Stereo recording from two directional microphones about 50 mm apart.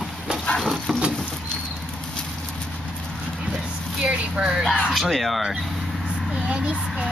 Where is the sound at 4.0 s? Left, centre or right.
Centre.